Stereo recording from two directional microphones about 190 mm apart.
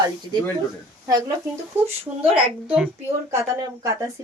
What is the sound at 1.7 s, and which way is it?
Speech, 10° right (ahead or behind).